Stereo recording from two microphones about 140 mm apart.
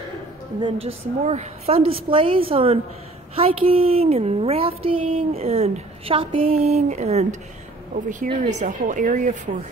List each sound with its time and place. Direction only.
0.6 s a woman's voice: 40° right (ahead or behind)
1.8 s a woman's voice: 40° right (ahead or behind)
7.9 s speech: 70° right (ahead or behind)